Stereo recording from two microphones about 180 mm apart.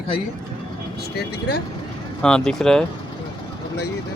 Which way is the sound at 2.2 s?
5° left (ahead or behind).